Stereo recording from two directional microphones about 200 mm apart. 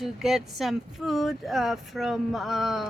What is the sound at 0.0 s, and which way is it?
Speech, centre (ahead or behind).